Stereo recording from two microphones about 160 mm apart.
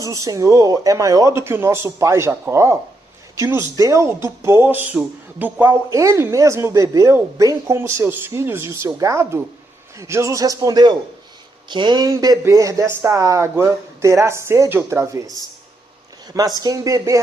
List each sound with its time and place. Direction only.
0.0 s speech: 20° right (ahead or behind)